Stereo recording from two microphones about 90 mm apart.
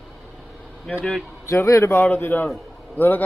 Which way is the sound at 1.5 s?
35° left (ahead or behind).